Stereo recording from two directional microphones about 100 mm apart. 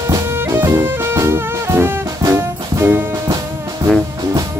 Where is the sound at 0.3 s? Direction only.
25° right (ahead or behind).